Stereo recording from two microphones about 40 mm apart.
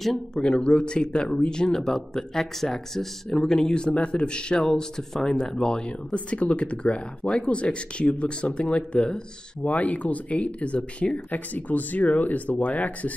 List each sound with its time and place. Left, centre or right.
0.3 s speech: left
9.6 s speech: left
11.3 s speech: left